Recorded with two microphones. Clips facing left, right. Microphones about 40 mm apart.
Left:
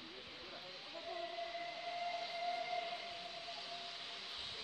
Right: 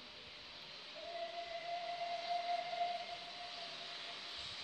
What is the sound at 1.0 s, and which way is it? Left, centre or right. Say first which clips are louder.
Steam whistle: even; centre.